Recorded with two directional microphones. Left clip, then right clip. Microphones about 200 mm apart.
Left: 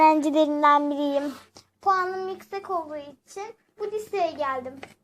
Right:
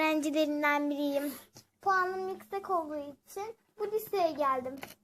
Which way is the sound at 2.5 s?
5° right (ahead or behind).